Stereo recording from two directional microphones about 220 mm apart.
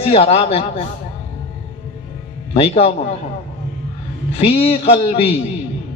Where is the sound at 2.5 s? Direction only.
25° left (ahead or behind).